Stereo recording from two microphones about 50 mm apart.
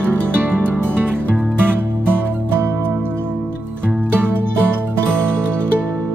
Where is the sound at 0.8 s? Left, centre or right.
Right.